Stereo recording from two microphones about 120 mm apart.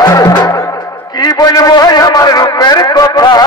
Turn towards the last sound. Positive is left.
turn(degrees=35)  # may be behind; listen again after turning